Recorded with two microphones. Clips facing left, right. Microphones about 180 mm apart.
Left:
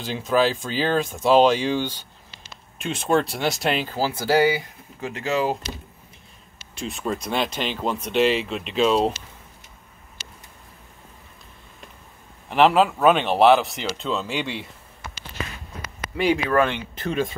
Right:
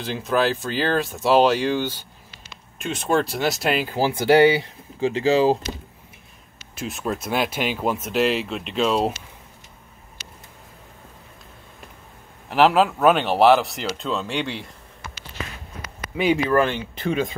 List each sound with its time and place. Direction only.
0.0 s speech: centre (ahead or behind)
3.9 s speech: 20° right (ahead or behind)
6.7 s speech: 5° right (ahead or behind)
10.2 s a sound: 30° left (ahead or behind)
12.4 s speech: centre (ahead or behind)
16.2 s speech: centre (ahead or behind)
17.1 s speech: 20° right (ahead or behind)